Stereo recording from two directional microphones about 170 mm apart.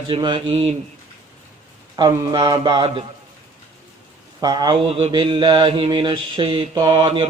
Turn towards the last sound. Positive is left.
turn(degrees=-30)  # may be behind; listen again after turning